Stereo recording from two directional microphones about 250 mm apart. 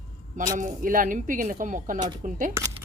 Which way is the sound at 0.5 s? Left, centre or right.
Right.